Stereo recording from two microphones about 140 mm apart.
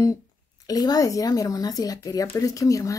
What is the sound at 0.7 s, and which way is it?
A woman's voice, 25° left (ahead or behind).